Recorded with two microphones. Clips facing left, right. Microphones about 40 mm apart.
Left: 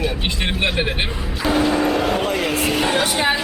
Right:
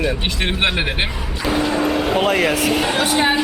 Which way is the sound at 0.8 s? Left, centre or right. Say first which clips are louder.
Right 1 dB; right.